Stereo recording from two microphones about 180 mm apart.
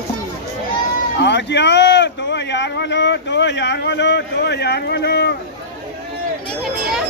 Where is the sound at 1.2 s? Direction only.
75° left (ahead or behind).